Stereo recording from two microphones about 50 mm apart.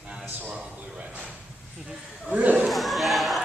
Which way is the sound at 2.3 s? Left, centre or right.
Right.